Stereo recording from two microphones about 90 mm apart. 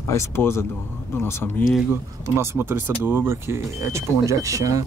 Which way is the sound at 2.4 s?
25° right (ahead or behind).